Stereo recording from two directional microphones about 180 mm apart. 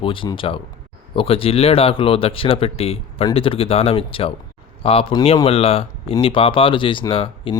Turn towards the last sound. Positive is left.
turn(degrees=30)  # may be behind; listen again after turning